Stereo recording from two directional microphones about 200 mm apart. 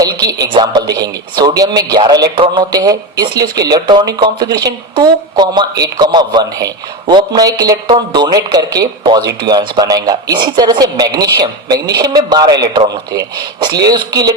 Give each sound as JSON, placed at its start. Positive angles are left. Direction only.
{"t": 0.0, "sound": "speech", "side_deg": -20}